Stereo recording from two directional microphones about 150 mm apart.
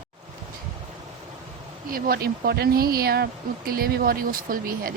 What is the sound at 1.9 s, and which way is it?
Speech, 80° right.